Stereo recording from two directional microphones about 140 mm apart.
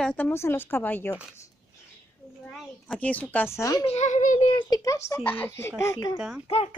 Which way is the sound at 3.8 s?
50° left (ahead or behind).